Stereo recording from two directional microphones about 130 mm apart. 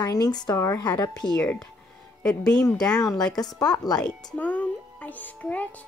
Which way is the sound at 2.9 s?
30° left (ahead or behind).